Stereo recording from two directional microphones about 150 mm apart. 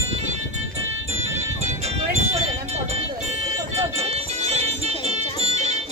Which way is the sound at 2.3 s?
45° right (ahead or behind).